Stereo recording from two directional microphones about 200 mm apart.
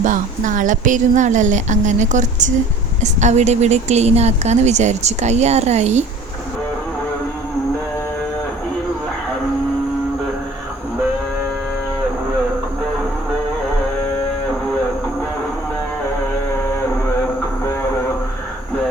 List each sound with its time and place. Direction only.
0.0 s a woman's voice: 40° right (ahead or behind)